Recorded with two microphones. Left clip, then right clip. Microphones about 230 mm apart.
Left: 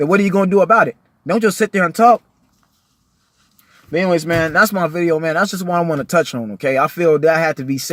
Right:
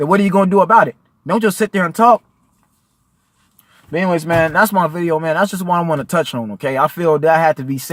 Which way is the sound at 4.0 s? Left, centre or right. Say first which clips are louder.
Right 1 dB; right.